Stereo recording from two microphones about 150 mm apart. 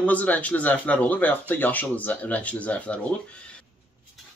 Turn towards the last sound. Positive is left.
turn(degrees=10)  # may be behind; listen again after turning